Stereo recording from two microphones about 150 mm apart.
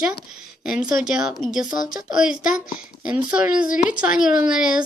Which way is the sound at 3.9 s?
5° right (ahead or behind).